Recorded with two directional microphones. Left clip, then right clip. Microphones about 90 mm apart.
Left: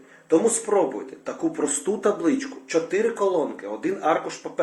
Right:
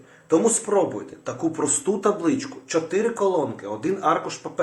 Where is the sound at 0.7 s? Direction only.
45° right (ahead or behind).